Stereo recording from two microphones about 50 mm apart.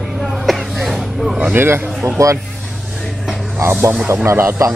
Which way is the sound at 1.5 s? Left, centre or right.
Right.